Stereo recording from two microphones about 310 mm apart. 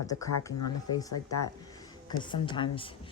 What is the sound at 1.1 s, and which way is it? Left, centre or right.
Speech, left.